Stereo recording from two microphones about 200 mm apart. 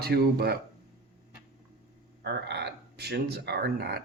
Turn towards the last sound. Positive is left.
turn(degrees=-55)  # may be behind; listen again after turning